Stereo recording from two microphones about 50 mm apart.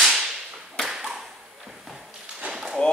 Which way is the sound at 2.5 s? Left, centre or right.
Centre.